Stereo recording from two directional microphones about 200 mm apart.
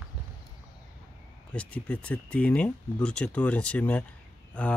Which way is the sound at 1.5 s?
5° left (ahead or behind).